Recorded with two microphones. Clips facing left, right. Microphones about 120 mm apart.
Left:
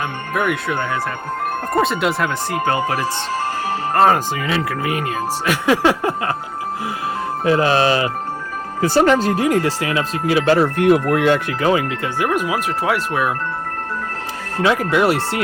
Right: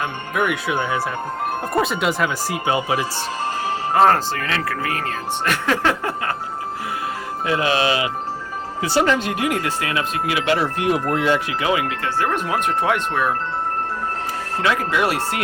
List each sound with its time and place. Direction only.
0.3 s speech: centre (ahead or behind)
3.9 s speech: 5° left (ahead or behind)
5.5 s speech: 5° left (ahead or behind)
6.0 s speech: 20° left (ahead or behind)
7.4 s speech: 40° left (ahead or behind); by 11.3 s 60° left (ahead or behind)
11.6 s speech: 35° left (ahead or behind)
12.2 s speech: 10° left (ahead or behind)
14.8 s speech: 25° left (ahead or behind)